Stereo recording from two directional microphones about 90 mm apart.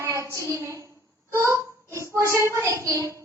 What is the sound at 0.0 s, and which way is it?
Music, 35° right (ahead or behind).